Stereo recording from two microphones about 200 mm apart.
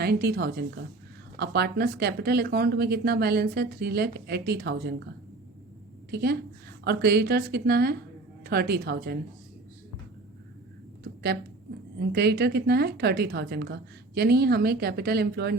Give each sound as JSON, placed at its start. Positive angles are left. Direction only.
{"t": 0.0, "sound": "speech", "side_deg": -55}
{"t": 6.1, "sound": "a woman's voice", "side_deg": -55}
{"t": 11.0, "sound": "a sound", "side_deg": -55}
{"t": 11.9, "sound": "speech", "side_deg": -55}